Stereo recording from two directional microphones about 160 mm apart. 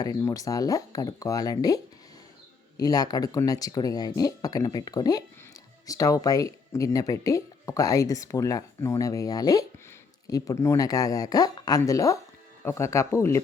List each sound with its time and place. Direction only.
0.0 s speech: 20° left (ahead or behind)